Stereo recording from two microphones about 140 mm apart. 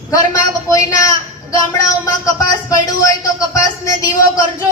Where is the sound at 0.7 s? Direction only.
25° left (ahead or behind).